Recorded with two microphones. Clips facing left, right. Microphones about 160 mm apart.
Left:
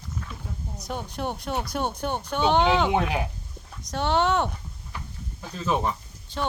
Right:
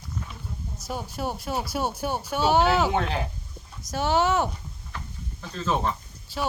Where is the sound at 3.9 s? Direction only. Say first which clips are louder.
Even; 5° right (ahead or behind).